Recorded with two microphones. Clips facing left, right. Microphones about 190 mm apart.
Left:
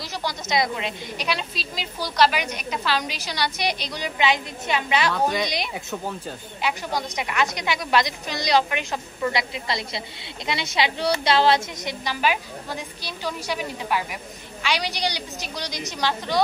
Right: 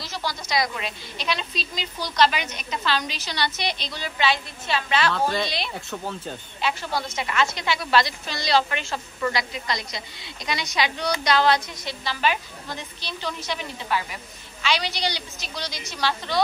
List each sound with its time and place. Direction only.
0.0 s a woman's voice: 15° left (ahead or behind)
1.2 s a woman's voice: 5° left (ahead or behind)